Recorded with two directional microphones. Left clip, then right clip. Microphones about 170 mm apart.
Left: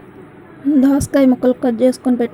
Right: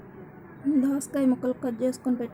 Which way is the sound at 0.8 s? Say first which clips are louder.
Left 16 dB; 25° left (ahead or behind).